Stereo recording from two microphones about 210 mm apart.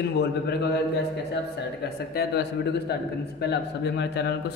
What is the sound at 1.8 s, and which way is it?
A man's voice, 50° left (ahead or behind).